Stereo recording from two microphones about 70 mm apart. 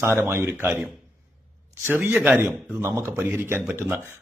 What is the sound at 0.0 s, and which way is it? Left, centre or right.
Speech, right.